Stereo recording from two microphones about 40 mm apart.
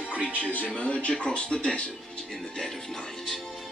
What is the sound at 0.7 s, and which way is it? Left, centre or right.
Speech, left.